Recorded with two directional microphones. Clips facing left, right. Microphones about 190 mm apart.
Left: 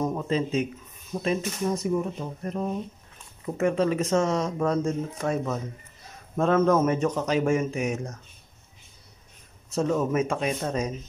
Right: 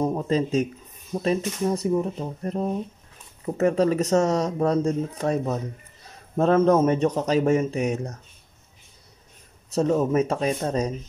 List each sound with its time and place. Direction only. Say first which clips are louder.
0.0 s speech: right 3 dB; 35° right (ahead or behind)
9.8 s speech: right 3 dB; 35° right (ahead or behind)